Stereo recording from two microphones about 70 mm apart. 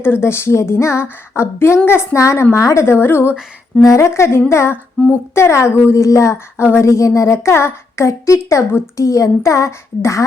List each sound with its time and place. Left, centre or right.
0.0 s a woman's voice: left
3.8 s a woman's voice: left